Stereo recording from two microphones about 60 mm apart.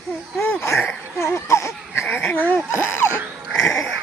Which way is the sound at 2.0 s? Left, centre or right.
Left.